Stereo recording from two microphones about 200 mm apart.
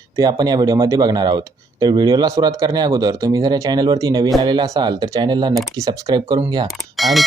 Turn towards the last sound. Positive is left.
turn(degrees=0)  # may be behind; listen again after turning